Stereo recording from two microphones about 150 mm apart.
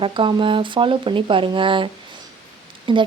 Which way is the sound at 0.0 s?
35° right (ahead or behind).